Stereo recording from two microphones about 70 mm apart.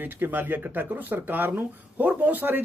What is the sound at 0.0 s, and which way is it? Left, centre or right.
Speech, right.